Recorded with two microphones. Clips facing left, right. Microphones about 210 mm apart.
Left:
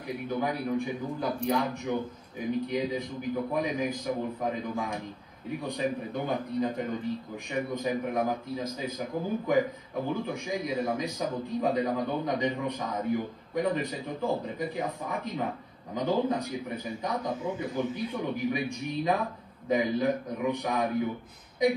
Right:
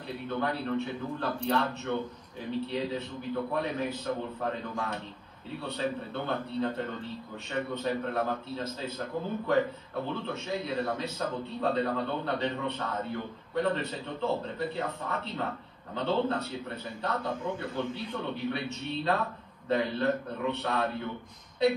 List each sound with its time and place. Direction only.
0.1 s a man's voice: 10° left (ahead or behind)